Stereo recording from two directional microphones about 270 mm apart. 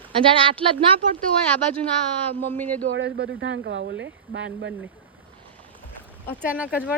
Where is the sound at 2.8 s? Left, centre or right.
Right.